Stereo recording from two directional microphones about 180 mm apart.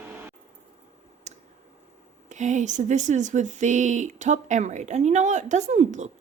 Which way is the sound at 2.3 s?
40° right (ahead or behind).